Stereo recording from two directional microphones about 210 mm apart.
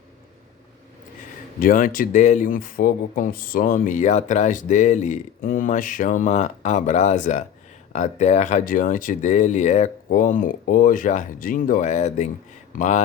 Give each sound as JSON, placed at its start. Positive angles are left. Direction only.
{"t": 1.5, "sound": "speech", "side_deg": 40}